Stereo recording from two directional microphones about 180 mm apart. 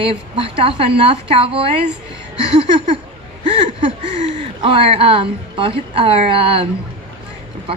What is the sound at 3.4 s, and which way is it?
A woman's voice, 35° right (ahead or behind).